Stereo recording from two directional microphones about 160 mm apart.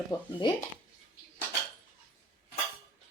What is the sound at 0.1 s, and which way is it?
Speech, 30° left (ahead or behind).